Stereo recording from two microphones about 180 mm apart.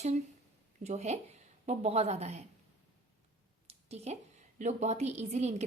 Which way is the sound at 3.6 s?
35° right (ahead or behind).